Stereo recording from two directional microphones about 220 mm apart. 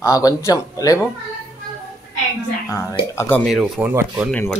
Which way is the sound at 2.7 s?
15° left (ahead or behind).